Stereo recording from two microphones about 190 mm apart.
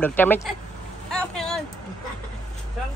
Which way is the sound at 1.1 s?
5° left (ahead or behind).